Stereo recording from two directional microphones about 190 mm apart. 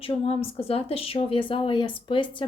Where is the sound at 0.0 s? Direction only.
30° left (ahead or behind).